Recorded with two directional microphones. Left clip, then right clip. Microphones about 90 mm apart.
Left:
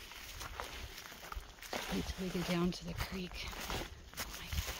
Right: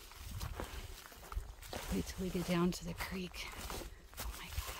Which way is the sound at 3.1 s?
25° right (ahead or behind).